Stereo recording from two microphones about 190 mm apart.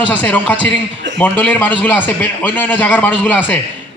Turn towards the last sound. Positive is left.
turn(degrees=10)  # may be behind; listen again after turning